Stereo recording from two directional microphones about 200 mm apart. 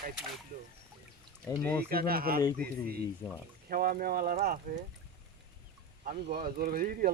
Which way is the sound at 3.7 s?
45° right (ahead or behind).